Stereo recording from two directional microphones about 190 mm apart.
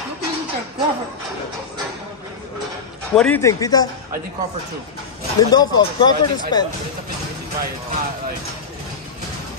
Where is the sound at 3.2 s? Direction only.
10° left (ahead or behind).